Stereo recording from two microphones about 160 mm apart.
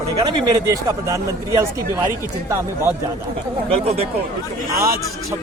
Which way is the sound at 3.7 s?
40° right (ahead or behind).